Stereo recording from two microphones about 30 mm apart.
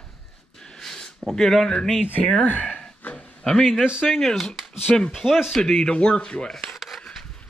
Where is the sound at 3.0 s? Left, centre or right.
Left.